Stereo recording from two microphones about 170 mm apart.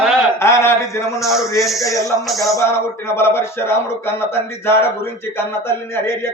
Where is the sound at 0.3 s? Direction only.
15° left (ahead or behind).